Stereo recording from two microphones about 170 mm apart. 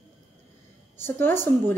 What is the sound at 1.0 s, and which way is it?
Speech, 15° left (ahead or behind).